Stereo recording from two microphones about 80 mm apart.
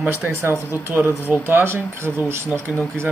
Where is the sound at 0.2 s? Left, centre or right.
Right.